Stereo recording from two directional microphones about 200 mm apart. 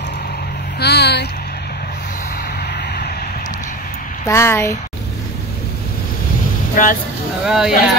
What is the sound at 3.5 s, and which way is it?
Vehicle, 40° left (ahead or behind).